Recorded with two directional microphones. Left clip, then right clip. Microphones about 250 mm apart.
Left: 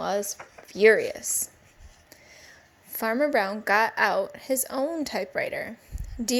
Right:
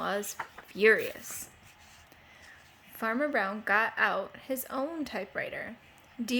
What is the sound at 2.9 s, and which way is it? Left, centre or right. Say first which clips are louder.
A woman's voice: left 6 dB; centre.